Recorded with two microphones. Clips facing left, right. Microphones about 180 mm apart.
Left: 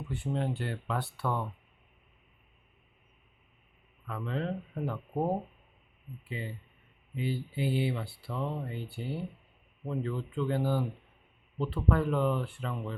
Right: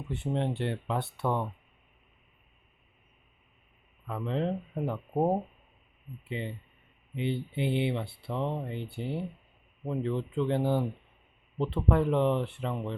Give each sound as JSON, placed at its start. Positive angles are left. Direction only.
{"t": 0.1, "sound": "speech", "side_deg": -25}
{"t": 4.0, "sound": "speech", "side_deg": -20}